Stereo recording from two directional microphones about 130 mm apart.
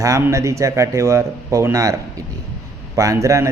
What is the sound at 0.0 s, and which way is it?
Speech, 25° right (ahead or behind).